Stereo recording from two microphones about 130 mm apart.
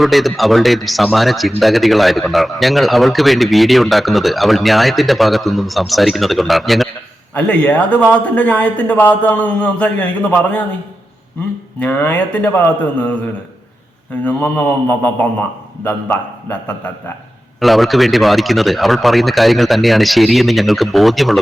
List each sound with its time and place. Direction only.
0.0 s speech: centre (ahead or behind)
7.3 s a man's voice: 10° left (ahead or behind)
11.8 s a man's voice: 15° left (ahead or behind)
14.3 s a man's voice: 15° left (ahead or behind)
17.6 s speech: centre (ahead or behind)